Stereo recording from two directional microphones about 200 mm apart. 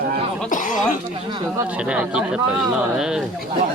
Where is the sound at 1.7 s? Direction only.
5° right (ahead or behind).